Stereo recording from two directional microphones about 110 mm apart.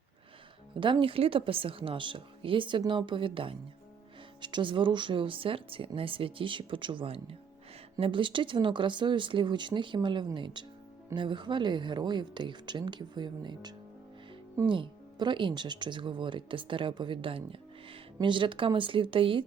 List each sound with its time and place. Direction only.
0.8 s speech: 50° right (ahead or behind)